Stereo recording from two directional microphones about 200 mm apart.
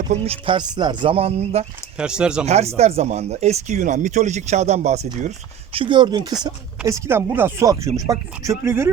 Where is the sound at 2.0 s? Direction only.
5° right (ahead or behind).